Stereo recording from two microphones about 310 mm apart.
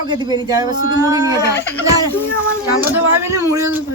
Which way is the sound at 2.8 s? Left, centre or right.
Centre.